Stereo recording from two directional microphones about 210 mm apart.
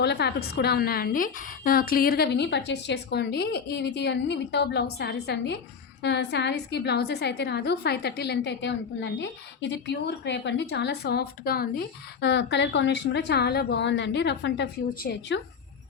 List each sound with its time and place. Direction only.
0.0 s a woman's voice: 50° left (ahead or behind)